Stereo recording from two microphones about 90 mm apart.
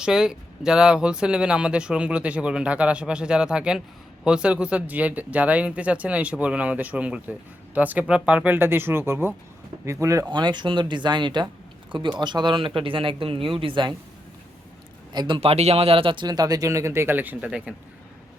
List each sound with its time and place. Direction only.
0.0 s speech: 5° right (ahead or behind); by 10.2 s 35° right (ahead or behind)
10.2 s speech: 55° right (ahead or behind)
15.1 s a man's voice: 50° right (ahead or behind)
15.4 s speech: 90° right
16.2 s speech: 45° right (ahead or behind); by 17.5 s 20° right (ahead or behind)